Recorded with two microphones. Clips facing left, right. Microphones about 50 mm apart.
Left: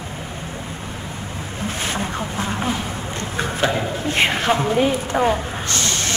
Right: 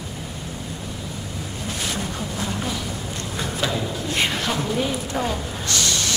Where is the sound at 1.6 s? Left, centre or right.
Left.